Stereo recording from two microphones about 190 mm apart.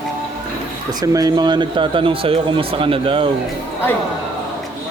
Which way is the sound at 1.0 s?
20° right (ahead or behind).